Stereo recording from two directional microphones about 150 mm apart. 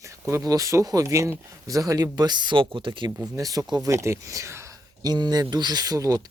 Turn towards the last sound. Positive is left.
turn(degrees=-25)  # may be behind; listen again after turning